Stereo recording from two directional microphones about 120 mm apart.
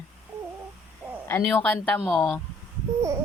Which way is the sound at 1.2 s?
15° left (ahead or behind).